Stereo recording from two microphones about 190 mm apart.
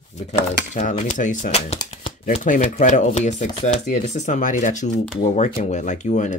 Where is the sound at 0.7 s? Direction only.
40° left (ahead or behind).